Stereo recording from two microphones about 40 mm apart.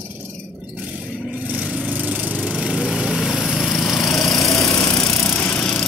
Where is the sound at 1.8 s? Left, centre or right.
Right.